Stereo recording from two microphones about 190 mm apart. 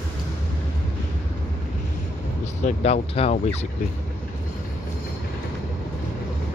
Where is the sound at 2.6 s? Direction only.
40° left (ahead or behind).